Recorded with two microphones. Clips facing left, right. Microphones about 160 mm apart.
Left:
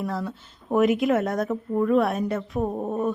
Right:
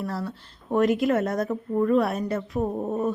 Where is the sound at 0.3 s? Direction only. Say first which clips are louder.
Left 1 dB; centre (ahead or behind).